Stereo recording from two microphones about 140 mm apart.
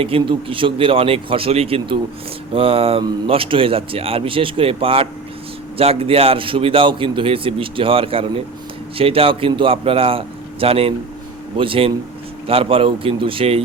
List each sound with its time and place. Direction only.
0.0 s a man's voice: 40° right (ahead or behind)